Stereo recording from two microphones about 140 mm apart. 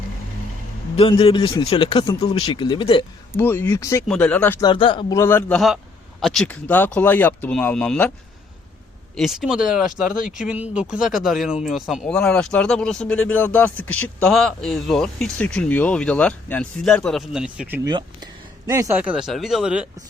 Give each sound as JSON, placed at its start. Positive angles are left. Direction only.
{"t": 1.2, "sound": "speech", "side_deg": 40}
{"t": 3.3, "sound": "speech", "side_deg": 15}
{"t": 4.0, "sound": "speech", "side_deg": 5}
{"t": 4.6, "sound": "speech", "side_deg": 35}
{"t": 5.0, "sound": "a man's voice", "side_deg": 20}
{"t": 5.5, "sound": "speech", "side_deg": 0}
{"t": 9.1, "sound": "speech", "side_deg": 0}
{"t": 17.8, "sound": "speech", "side_deg": -30}
{"t": 18.9, "sound": "speech", "side_deg": -10}